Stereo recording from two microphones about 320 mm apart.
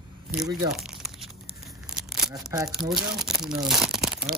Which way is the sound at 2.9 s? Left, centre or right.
Centre.